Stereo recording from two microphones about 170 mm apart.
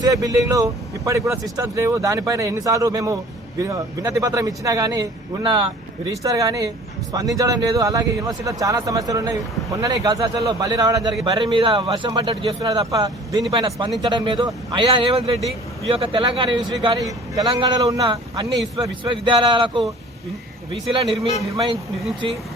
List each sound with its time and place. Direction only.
0.0 s speech: 20° right (ahead or behind)